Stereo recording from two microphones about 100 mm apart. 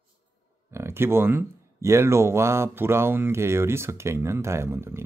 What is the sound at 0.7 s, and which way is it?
Speech, 25° right (ahead or behind).